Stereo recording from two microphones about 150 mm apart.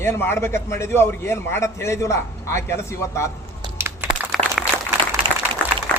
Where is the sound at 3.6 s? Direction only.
15° right (ahead or behind).